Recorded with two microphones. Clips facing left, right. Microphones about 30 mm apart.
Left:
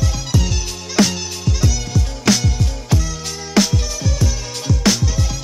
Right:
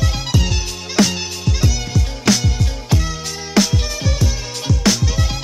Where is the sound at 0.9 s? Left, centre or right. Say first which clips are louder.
Even; centre.